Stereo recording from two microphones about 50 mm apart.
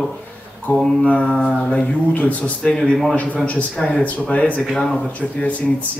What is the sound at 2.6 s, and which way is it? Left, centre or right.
Speech, centre.